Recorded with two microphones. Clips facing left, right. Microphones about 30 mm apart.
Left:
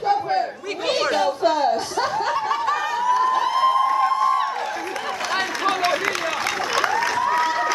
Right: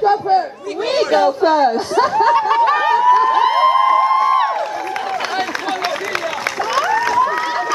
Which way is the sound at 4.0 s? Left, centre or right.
Right.